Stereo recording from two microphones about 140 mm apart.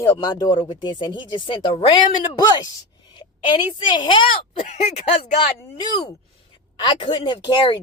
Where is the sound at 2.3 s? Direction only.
30° left (ahead or behind).